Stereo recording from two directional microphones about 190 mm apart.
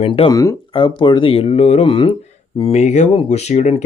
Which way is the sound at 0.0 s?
25° left (ahead or behind).